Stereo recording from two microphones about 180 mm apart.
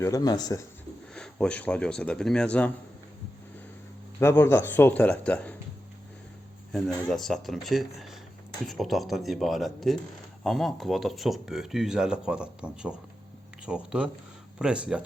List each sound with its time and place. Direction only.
0.0 s speech: 20° left (ahead or behind)
1.1 s speech: 5° left (ahead or behind)
4.2 s speech: 15° left (ahead or behind)
6.7 s speech: centre (ahead or behind)